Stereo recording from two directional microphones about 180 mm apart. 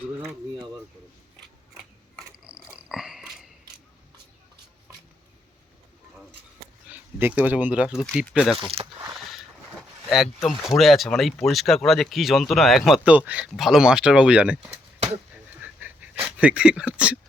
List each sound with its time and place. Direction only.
1.7 s a sound: 5° right (ahead or behind)
6.8 s speech: 10° right (ahead or behind)
8.8 s speech: 30° right (ahead or behind)
9.3 s a sound: centre (ahead or behind)
10.7 s speech: centre (ahead or behind)
15.6 s dog: 10° right (ahead or behind)
16.2 s speech: 5° right (ahead or behind)